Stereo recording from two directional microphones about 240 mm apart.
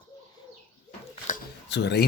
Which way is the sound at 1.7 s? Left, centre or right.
Left.